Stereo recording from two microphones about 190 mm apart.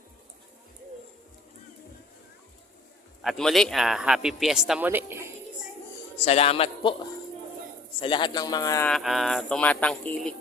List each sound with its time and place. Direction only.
3.2 s a man's voice: centre (ahead or behind)
6.2 s a man's voice: 35° left (ahead or behind); by 8.9 s 15° left (ahead or behind)
8.9 s a man's voice: centre (ahead or behind)